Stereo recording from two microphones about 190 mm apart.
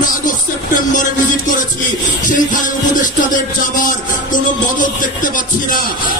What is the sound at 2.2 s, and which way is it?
Music, 45° left (ahead or behind).